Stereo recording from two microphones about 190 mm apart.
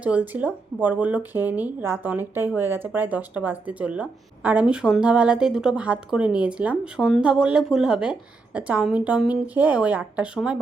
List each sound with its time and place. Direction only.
0.0 s speech: 5° right (ahead or behind)